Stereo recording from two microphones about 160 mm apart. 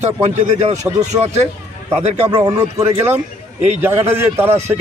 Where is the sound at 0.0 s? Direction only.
45° right (ahead or behind).